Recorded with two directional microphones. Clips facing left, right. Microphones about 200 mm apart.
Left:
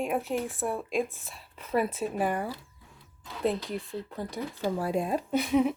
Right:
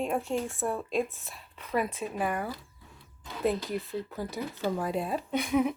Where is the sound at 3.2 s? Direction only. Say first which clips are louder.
Even; centre (ahead or behind).